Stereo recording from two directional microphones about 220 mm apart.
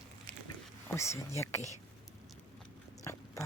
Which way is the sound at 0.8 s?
10° left (ahead or behind).